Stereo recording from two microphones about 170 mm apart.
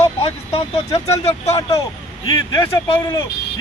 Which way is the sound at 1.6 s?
20° left (ahead or behind).